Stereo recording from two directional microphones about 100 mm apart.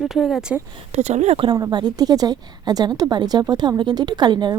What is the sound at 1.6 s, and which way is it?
A woman's voice, 45° right (ahead or behind).